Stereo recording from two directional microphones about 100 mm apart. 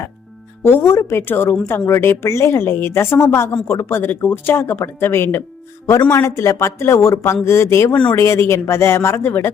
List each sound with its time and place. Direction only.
0.6 s speech: 20° left (ahead or behind)